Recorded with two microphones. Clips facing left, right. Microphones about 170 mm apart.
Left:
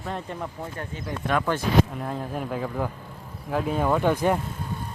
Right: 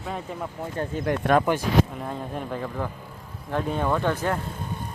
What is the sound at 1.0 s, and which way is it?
Speech, 65° right (ahead or behind).